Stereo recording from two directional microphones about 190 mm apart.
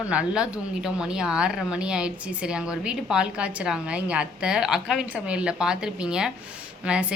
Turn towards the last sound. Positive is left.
turn(degrees=-5)  # may be behind; listen again after turning